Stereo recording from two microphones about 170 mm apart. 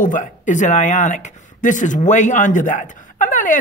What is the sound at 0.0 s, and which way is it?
Speech, 50° left (ahead or behind).